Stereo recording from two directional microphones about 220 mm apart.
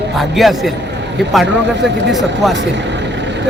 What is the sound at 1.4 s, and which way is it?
Speech, 50° right (ahead or behind).